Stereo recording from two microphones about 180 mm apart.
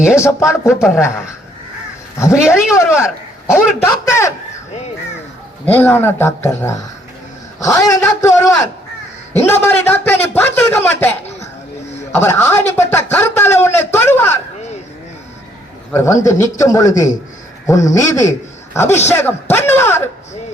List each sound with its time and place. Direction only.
0.2 s a man's voice: 15° left (ahead or behind)
0.7 s speech: centre (ahead or behind)
2.3 s speech: 5° right (ahead or behind)
3.4 s a man's voice: 15° left (ahead or behind)
5.6 s a man's voice: 10° left (ahead or behind)
12.1 s speech: 15° left (ahead or behind)
15.9 s a man's voice: 15° left (ahead or behind)